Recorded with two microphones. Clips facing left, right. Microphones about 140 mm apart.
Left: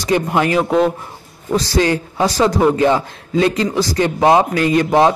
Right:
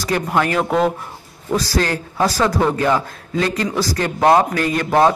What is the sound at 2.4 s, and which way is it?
Speech, 20° left (ahead or behind).